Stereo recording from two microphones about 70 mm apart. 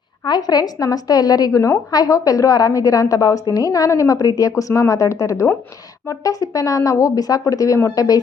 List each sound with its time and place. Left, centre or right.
0.3 s a woman's voice: left